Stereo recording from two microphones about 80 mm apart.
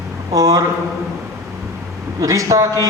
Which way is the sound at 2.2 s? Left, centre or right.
Right.